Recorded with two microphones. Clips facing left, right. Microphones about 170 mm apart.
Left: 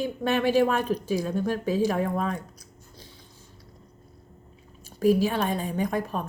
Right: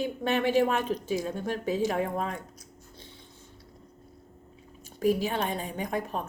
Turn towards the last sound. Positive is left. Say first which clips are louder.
# left 4 dB
turn(degrees=-20)  # may be behind; listen again after turning